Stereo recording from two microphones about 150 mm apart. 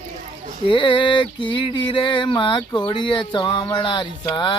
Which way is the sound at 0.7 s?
35° left (ahead or behind).